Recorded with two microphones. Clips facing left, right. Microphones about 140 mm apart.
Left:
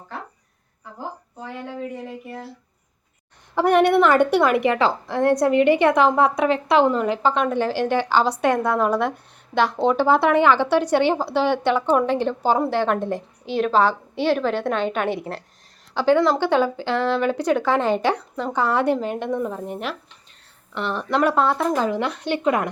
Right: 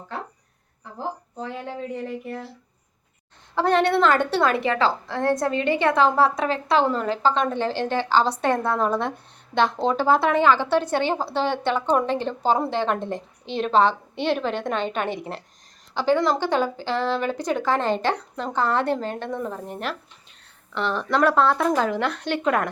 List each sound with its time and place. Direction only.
3.5 s a woman's voice: 15° left (ahead or behind)
6.9 s a woman's voice: 10° left (ahead or behind)
16.8 s speech: 10° right (ahead or behind)
17.7 s speech: 10° left (ahead or behind)